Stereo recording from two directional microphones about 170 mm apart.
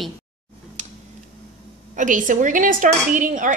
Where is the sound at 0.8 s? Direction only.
45° right (ahead or behind).